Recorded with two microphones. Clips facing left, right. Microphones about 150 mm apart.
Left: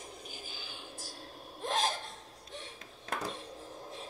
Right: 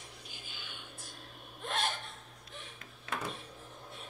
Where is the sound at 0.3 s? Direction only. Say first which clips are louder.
Left 4 dB; 35° left (ahead or behind).